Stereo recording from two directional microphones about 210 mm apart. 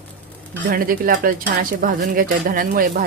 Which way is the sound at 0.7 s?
45° right (ahead or behind).